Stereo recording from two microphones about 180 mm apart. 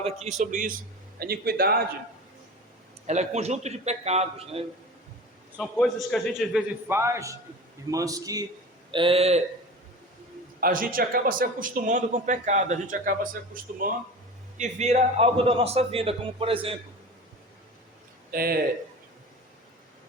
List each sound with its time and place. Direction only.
0.0 s a man's voice: 35° right (ahead or behind)
1.2 s speech: 60° right (ahead or behind)
3.1 s a man's voice: 40° right (ahead or behind)
5.5 s a man's voice: 5° left (ahead or behind)
6.8 s a man's voice: 15° right (ahead or behind)
8.9 s a man's voice: 30° right (ahead or behind)
10.6 s a man's voice: 50° right (ahead or behind)
14.6 s a man's voice: 40° right (ahead or behind)
18.3 s a man's voice: 55° right (ahead or behind)